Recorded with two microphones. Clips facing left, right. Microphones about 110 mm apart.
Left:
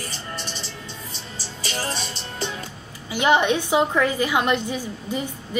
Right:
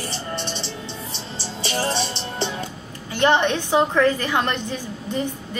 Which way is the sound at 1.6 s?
30° right (ahead or behind).